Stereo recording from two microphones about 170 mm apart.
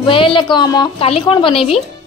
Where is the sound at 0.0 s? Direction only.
30° left (ahead or behind).